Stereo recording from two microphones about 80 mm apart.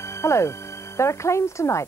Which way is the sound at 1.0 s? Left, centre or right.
Left.